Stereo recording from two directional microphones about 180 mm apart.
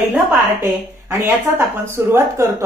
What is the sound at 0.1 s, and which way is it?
Speech, 15° right (ahead or behind).